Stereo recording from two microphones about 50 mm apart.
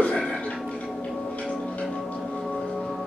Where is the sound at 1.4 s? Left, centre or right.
Left.